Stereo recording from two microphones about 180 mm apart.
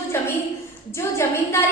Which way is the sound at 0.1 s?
15° left (ahead or behind).